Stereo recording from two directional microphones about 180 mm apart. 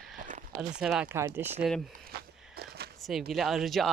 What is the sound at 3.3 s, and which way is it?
Speech, centre (ahead or behind).